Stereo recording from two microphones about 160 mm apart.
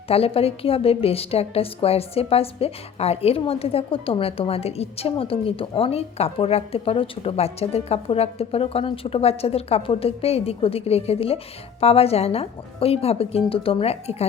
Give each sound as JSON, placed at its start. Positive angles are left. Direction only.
{"t": 0.1, "sound": "a woman's voice", "side_deg": 35}